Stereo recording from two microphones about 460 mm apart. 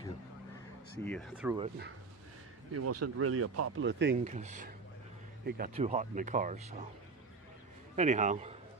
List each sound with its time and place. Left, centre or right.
1.0 s speech: centre
2.7 s speech: right; by 6.7 s centre
7.9 s a man's voice: centre